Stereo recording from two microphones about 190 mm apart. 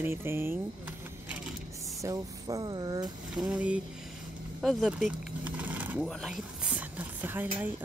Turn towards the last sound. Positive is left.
turn(degrees=-10)  # may be behind; listen again after turning